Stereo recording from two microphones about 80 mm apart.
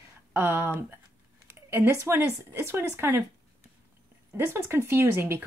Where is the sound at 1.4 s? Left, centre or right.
Right.